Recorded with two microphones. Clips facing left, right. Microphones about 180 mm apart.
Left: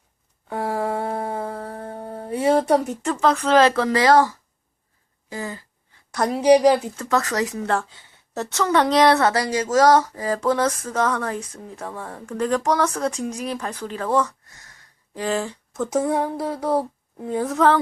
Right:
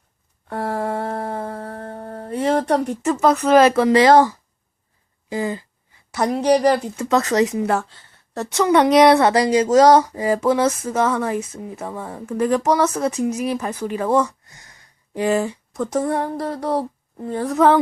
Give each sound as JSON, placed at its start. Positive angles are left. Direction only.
{"t": 0.4, "sound": "a sound", "side_deg": 5}
{"t": 3.1, "sound": "speech", "side_deg": -5}
{"t": 5.3, "sound": "speech", "side_deg": -20}
{"t": 6.1, "sound": "speech", "side_deg": 0}
{"t": 7.1, "sound": "speech", "side_deg": -20}
{"t": 7.6, "sound": "speech", "side_deg": -10}
{"t": 7.9, "sound": "a sound", "side_deg": 5}
{"t": 8.4, "sound": "speech", "side_deg": -15}